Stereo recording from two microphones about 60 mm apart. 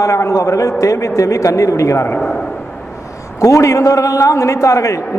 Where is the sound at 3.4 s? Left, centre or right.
Left.